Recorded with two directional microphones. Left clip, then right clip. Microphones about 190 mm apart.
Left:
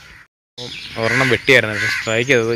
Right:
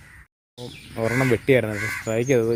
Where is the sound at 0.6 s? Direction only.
10° left (ahead or behind).